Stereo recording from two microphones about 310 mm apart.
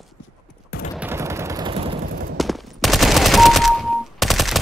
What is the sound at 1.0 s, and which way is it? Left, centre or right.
Gunshot, centre.